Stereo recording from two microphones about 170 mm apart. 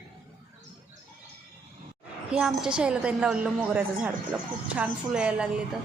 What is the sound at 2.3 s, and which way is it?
A woman's voice, 5° right (ahead or behind).